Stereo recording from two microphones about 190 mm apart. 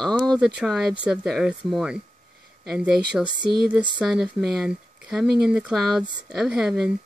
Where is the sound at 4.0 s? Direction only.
Centre (ahead or behind).